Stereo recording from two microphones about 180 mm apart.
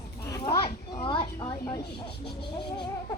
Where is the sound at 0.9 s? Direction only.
30° left (ahead or behind).